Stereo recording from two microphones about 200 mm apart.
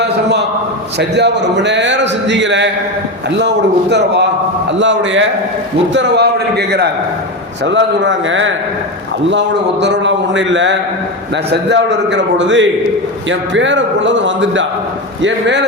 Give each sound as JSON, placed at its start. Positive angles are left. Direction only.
{"t": 0.9, "sound": "a man's voice", "side_deg": -60}
{"t": 9.8, "sound": "a man's voice", "side_deg": -60}